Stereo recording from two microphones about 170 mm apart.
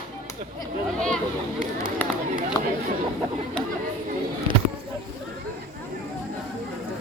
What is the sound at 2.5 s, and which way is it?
Chatter, 25° left (ahead or behind).